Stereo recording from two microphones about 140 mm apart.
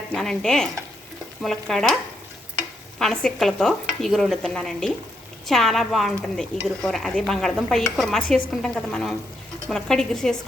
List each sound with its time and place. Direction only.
0.1 s speech: centre (ahead or behind)
3.0 s speech: 5° left (ahead or behind)